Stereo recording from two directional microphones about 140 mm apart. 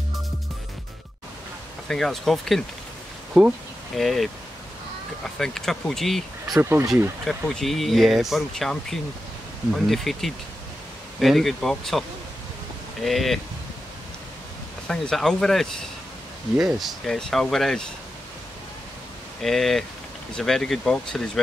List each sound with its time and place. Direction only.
1.9 s speech: centre (ahead or behind)
6.4 s speech: 20° right (ahead or behind)
7.2 s speech: 5° left (ahead or behind)
13.0 s speech: centre (ahead or behind)
14.9 s speech: 5° left (ahead or behind)
19.4 s speech: centre (ahead or behind)